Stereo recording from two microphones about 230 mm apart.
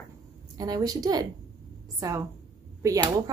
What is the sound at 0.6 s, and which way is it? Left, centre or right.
A woman's voice, centre.